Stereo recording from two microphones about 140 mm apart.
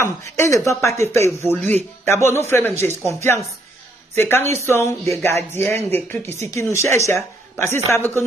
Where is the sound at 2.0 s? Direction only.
20° left (ahead or behind).